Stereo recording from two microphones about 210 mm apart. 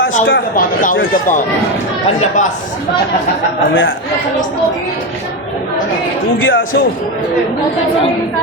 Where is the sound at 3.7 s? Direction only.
65° left (ahead or behind).